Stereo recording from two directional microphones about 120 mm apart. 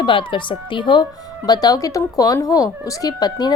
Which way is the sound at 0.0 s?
45° left (ahead or behind).